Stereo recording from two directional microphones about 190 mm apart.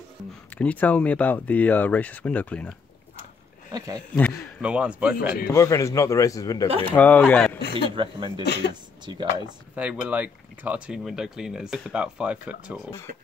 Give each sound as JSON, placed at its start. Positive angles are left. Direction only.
{"t": 0.5, "sound": "speech", "side_deg": 10}
{"t": 3.7, "sound": "speech", "side_deg": -20}
{"t": 4.1, "sound": "speech", "side_deg": -5}
{"t": 5.5, "sound": "speech", "side_deg": 15}
{"t": 7.7, "sound": "speech", "side_deg": -25}
{"t": 9.8, "sound": "speech", "side_deg": -5}